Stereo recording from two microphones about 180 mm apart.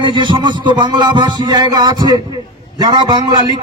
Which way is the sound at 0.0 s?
25° right (ahead or behind).